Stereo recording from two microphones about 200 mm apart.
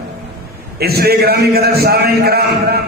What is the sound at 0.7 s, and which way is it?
A man's voice, 50° right (ahead or behind).